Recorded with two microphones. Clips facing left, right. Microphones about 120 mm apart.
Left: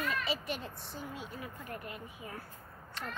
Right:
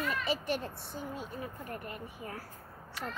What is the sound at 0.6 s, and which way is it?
Speech, 50° right (ahead or behind).